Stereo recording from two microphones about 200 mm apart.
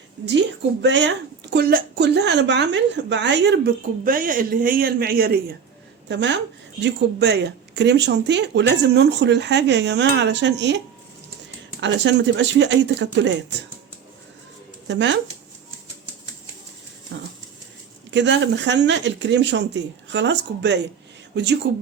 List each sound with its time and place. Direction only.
0.3 s a woman's voice: 60° right (ahead or behind)
4.0 s a woman's voice: 45° right (ahead or behind)
6.1 s a woman's voice: 60° right (ahead or behind)
11.8 s a woman's voice: 60° right (ahead or behind)
14.8 s a woman's voice: 65° right (ahead or behind)
17.1 s dog: 60° right (ahead or behind)
18.1 s a woman's voice: 65° right (ahead or behind)